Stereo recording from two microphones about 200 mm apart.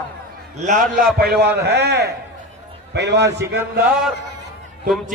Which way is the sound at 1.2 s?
50° right (ahead or behind).